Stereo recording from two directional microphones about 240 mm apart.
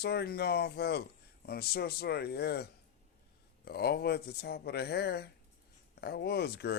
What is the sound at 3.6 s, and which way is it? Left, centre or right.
Speech, left.